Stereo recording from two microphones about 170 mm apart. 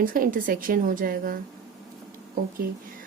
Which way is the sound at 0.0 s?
55° right (ahead or behind).